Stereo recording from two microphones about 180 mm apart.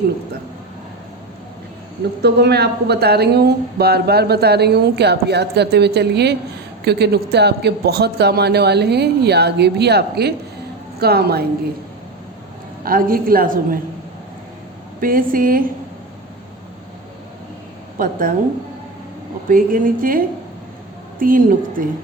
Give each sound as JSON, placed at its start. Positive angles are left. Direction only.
{"t": 2.2, "sound": "speech", "side_deg": -65}
{"t": 12.8, "sound": "a woman's voice", "side_deg": -55}
{"t": 15.0, "sound": "a woman's voice", "side_deg": -50}
{"t": 17.9, "sound": "a woman's voice", "side_deg": -50}
{"t": 19.5, "sound": "a woman's voice", "side_deg": -50}